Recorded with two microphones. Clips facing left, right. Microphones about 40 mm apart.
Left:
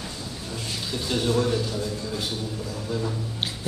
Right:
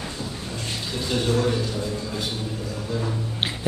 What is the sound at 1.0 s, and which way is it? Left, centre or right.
Speech, centre.